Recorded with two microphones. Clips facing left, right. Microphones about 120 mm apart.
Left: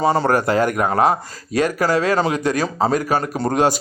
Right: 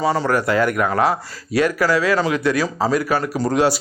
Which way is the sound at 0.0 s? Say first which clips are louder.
Left 2 dB; 45° left (ahead or behind).